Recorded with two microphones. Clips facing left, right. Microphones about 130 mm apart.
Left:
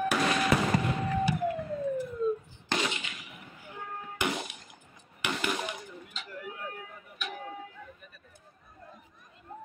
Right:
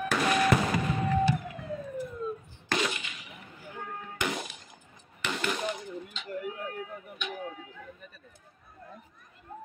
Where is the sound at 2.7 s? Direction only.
25° left (ahead or behind).